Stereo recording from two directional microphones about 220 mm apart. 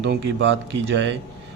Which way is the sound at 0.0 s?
55° right (ahead or behind).